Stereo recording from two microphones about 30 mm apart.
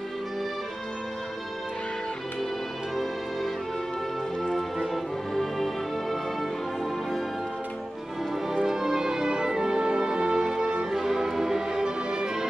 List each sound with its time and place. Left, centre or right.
5.3 s music: centre
8.5 s music: centre
10.9 s music: centre